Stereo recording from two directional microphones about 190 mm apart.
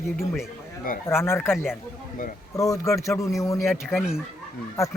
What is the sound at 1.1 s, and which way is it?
A man's voice, 10° left (ahead or behind).